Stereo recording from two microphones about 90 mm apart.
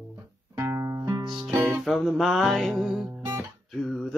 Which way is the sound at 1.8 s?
Centre (ahead or behind).